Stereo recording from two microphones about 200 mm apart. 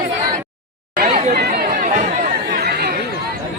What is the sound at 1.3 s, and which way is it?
Chatter, 55° right (ahead or behind).